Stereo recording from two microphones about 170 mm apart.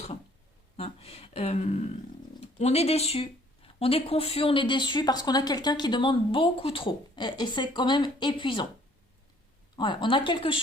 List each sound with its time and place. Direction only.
0.8 s speech: 35° left (ahead or behind)
9.7 s speech: 25° left (ahead or behind)